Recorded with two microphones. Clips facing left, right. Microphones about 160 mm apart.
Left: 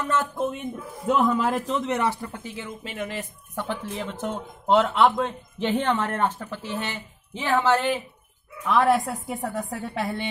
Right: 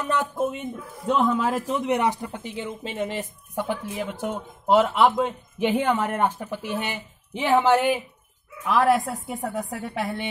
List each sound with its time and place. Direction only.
0.0 s speech: 15° right (ahead or behind)
0.5 s a woman's voice: centre (ahead or behind)
1.7 s speech: 15° right (ahead or behind)
3.5 s speech: 15° right (ahead or behind)
8.6 s a woman's voice: centre (ahead or behind)